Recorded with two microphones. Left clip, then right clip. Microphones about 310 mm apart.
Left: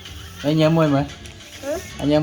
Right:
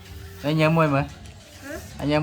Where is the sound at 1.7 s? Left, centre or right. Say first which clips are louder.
Left 10 dB; centre.